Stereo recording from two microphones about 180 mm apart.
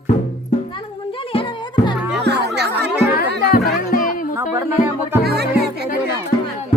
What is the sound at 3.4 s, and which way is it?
Music, 55° left (ahead or behind).